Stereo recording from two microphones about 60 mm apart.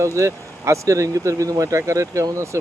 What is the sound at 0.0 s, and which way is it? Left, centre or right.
Speech, right.